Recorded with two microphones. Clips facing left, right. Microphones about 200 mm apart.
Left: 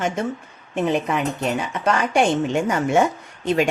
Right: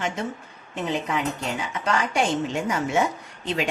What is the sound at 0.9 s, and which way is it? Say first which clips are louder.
Speech: left 4 dB; 55° left (ahead or behind).